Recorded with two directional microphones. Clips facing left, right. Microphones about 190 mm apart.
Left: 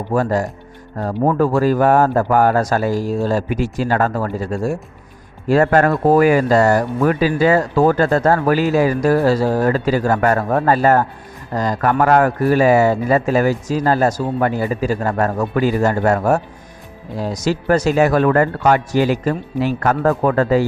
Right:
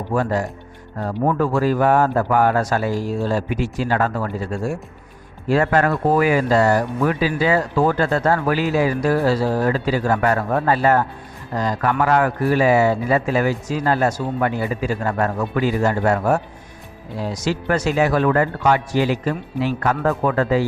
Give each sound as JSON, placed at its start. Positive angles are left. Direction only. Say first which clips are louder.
{"t": 0.1, "sound": "speech", "louder": "left 3 dB", "side_deg": 40}